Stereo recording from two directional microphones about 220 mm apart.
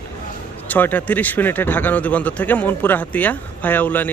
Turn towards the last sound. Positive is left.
turn(degrees=10)  # may be behind; listen again after turning